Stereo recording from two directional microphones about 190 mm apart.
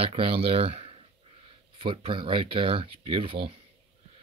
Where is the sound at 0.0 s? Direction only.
30° right (ahead or behind).